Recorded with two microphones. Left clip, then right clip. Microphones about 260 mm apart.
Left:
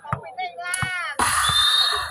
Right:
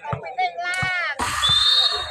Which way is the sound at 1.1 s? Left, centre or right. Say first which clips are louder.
Left 2 dB; left.